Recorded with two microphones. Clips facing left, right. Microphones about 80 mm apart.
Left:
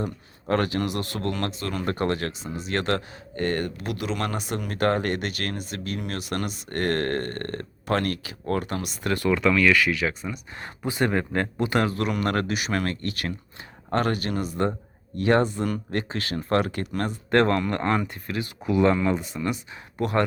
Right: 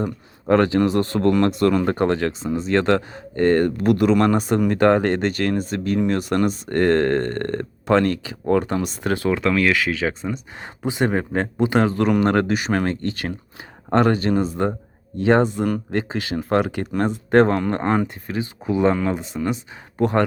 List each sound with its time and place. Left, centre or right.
0.0 s speech: right
1.5 s speech: right